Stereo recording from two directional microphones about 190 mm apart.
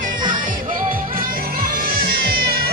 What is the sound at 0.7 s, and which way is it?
Music, 45° right (ahead or behind).